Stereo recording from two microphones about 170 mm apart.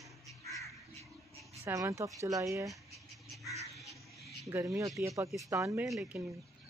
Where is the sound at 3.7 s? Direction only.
Centre (ahead or behind).